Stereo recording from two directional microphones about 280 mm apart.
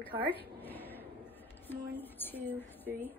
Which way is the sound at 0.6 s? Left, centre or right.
Centre.